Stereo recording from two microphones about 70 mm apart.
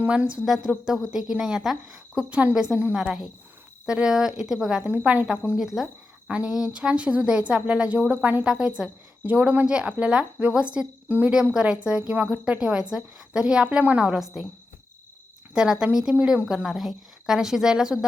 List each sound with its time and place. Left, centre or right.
0.0 s a woman's voice: centre
2.3 s a woman's voice: right
4.8 s a woman's voice: right
11.1 s speech: right
11.5 s a woman's voice: centre
15.5 s a woman's voice: centre